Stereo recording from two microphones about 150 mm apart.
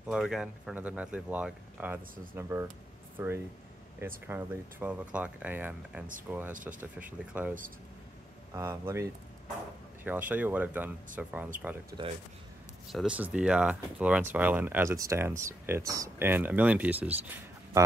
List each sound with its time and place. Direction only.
0.0 s speech: 5° right (ahead or behind)
6.5 s speech: 60° right (ahead or behind)
6.8 s speech: 10° right (ahead or behind)
8.5 s speech: 20° right (ahead or behind)
11.9 s speech: 25° right (ahead or behind)
12.8 s speech: 5° right (ahead or behind)